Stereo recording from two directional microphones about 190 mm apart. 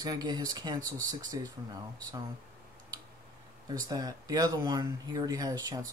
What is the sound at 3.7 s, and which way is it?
Speech, 20° right (ahead or behind).